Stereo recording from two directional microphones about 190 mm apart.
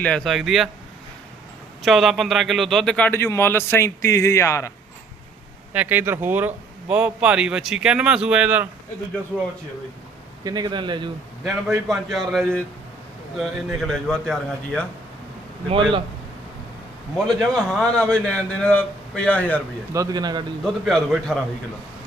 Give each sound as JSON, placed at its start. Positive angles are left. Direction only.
{"t": 0.0, "sound": "a man's voice", "side_deg": 5}
{"t": 1.8, "sound": "a man's voice", "side_deg": 0}
{"t": 5.7, "sound": "a man's voice", "side_deg": -10}
{"t": 10.4, "sound": "a man's voice", "side_deg": -20}
{"t": 11.9, "sound": "a man's voice", "side_deg": 0}
{"t": 15.7, "sound": "a man's voice", "side_deg": -25}
{"t": 17.2, "sound": "a man's voice", "side_deg": 5}
{"t": 19.9, "sound": "a man's voice", "side_deg": -20}
{"t": 20.7, "sound": "a man's voice", "side_deg": 0}